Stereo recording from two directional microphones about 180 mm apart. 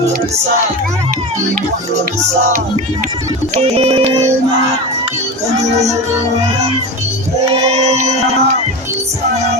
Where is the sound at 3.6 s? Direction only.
35° right (ahead or behind).